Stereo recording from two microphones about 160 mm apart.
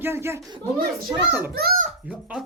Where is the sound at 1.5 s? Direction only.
75° right (ahead or behind).